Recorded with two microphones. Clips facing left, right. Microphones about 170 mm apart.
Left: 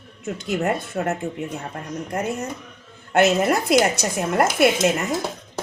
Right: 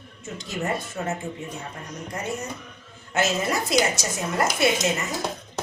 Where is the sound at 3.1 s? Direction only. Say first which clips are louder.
Left 7 dB; 60° left (ahead or behind).